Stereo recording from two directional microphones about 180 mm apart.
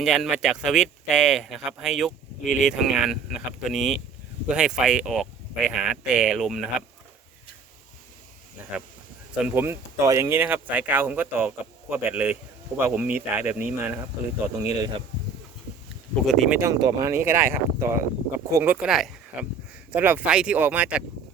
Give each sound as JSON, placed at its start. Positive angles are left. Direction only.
{"t": 0.0, "sound": "speech", "side_deg": -5}
{"t": 9.3, "sound": "speech", "side_deg": -10}
{"t": 16.2, "sound": "speech", "side_deg": 0}
{"t": 16.6, "sound": "speech", "side_deg": -20}